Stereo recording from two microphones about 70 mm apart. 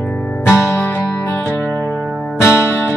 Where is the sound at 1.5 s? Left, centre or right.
Centre.